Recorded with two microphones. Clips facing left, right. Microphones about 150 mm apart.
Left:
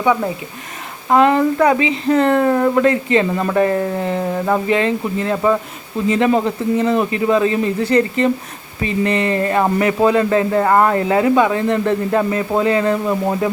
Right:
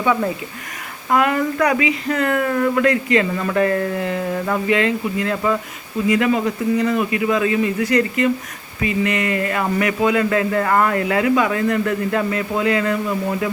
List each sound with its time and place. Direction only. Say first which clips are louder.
0.0 s speech: left 2 dB; 15° left (ahead or behind)